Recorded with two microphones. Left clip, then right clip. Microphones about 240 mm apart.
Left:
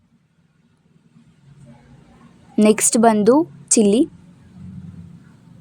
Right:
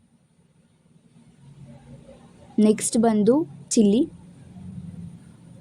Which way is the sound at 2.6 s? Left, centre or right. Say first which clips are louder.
Left 6 dB; left.